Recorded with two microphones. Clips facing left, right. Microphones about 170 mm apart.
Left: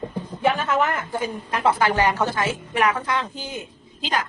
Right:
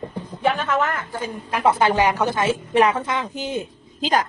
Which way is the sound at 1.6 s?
25° right (ahead or behind).